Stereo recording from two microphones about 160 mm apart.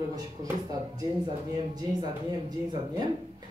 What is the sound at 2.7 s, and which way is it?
Speech, 30° right (ahead or behind).